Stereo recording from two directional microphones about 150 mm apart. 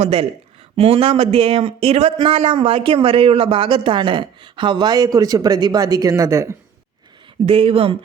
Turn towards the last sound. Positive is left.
turn(degrees=-40)  # may be behind; listen again after turning